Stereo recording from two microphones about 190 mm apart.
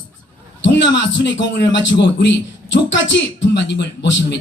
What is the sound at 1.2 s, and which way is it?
A man's voice, 70° left (ahead or behind).